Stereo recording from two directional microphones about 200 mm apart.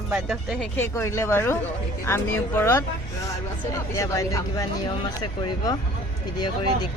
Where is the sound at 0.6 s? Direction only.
10° left (ahead or behind).